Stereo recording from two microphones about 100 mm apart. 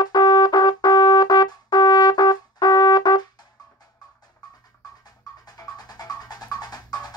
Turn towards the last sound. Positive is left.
turn(degrees=40)  # may be behind; listen again after turning